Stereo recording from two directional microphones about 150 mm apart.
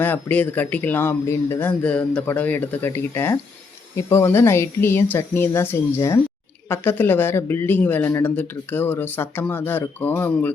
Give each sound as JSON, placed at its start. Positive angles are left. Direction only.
{"t": 0.0, "sound": "speech", "side_deg": 10}